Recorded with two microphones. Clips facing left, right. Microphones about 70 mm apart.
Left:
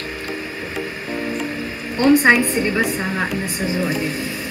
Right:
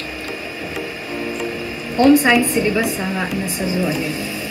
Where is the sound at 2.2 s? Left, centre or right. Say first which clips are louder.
Even; left.